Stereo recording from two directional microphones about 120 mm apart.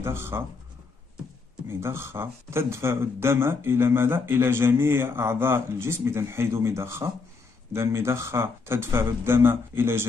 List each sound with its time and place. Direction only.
0.0 s speech: 20° right (ahead or behind)
1.7 s speech: 20° right (ahead or behind)